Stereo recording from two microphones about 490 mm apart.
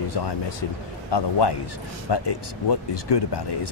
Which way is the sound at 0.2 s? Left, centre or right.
Left.